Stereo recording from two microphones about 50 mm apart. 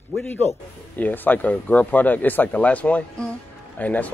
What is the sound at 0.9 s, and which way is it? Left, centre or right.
A man's voice, left.